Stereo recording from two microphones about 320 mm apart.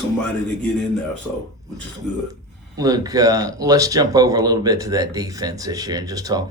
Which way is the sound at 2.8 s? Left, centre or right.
Centre.